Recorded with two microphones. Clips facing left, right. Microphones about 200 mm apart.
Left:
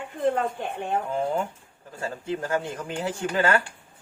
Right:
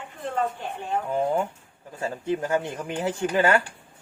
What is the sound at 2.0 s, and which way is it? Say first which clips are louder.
Speech: right 3 dB; 20° right (ahead or behind).